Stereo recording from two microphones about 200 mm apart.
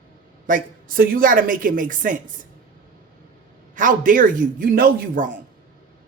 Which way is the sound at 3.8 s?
40° right (ahead or behind).